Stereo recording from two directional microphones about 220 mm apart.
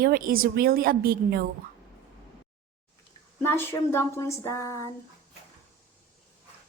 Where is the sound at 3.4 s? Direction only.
10° left (ahead or behind).